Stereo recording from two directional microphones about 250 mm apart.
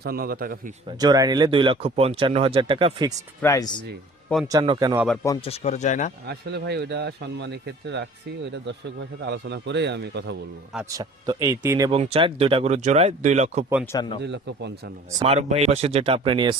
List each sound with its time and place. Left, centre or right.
0.0 s speech: right
0.9 s speech: centre
3.4 s speech: centre
4.5 s speech: centre
4.9 s speech: centre
5.5 s speech: left
6.2 s a man's voice: right
10.9 s speech: centre
11.9 s speech: right
13.9 s speech: centre
14.2 s a man's voice: right
15.2 s speech: right